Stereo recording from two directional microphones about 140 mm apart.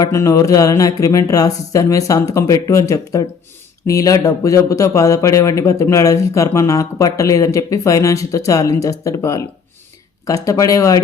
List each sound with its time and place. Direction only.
0.0 s speech: 20° left (ahead or behind)